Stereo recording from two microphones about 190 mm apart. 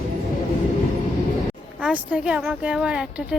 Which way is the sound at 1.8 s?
5° right (ahead or behind).